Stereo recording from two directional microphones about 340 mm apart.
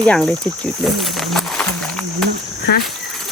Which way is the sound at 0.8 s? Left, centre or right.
Centre.